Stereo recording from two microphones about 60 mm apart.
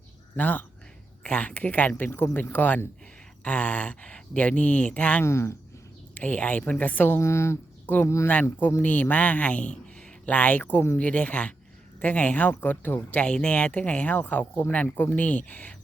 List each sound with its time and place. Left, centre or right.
0.3 s speech: left
2.0 s speech: left
5.2 s speech: left
6.1 s speech: left
7.2 s speech: left
8.4 s speech: left
13.2 s speech: centre